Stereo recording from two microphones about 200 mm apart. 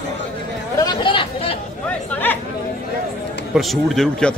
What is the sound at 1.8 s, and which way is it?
Speech, 10° left (ahead or behind).